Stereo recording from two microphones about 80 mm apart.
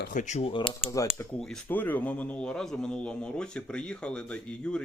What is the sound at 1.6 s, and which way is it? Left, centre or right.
Speech, left.